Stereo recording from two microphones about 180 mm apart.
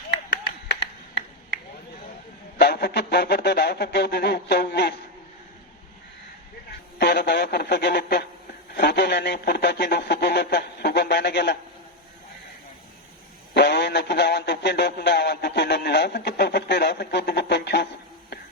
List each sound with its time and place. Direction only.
0.7 s a sound: 75° left (ahead or behind)
2.6 s speech: 65° left (ahead or behind)
7.0 s speech: 65° left (ahead or behind)
13.5 s speech: 65° left (ahead or behind)